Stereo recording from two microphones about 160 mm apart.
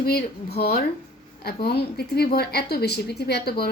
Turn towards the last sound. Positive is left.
turn(degrees=85)